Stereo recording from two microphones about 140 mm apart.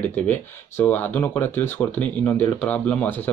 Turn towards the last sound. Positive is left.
turn(degrees=15)  # may be behind; listen again after turning